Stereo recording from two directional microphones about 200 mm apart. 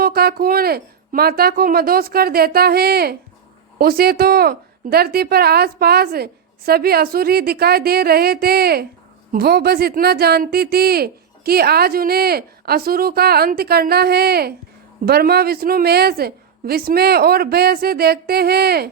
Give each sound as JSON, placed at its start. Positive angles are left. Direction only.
{"t": 0.0, "sound": "speech", "side_deg": -50}